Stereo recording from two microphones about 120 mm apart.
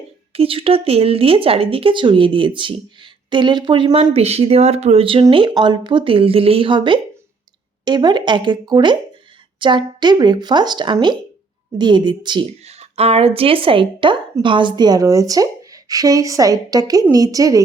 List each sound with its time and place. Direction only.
0.3 s speech: 50° right (ahead or behind)
4.1 s a woman's voice: 60° right (ahead or behind); by 12.5 s 40° right (ahead or behind)
12.6 s speech: 60° right (ahead or behind); by 17.6 s 30° right (ahead or behind)